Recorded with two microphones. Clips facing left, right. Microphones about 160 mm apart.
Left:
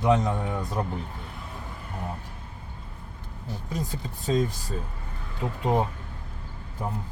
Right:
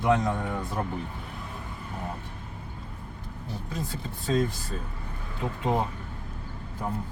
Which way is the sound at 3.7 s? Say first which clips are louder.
Left 3 dB; 15° left (ahead or behind).